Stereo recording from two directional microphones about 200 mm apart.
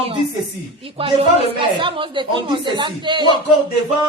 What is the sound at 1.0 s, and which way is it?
Speech, 30° right (ahead or behind).